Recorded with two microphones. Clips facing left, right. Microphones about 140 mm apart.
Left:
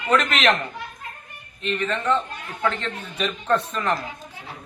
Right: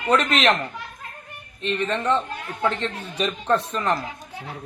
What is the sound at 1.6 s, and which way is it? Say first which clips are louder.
A man's voice: right 1 dB; 35° right (ahead or behind).